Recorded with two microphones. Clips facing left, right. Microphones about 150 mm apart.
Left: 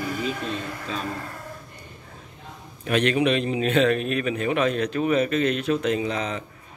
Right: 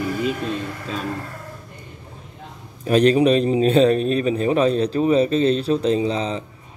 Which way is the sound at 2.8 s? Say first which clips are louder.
Right 6 dB; 35° right (ahead or behind).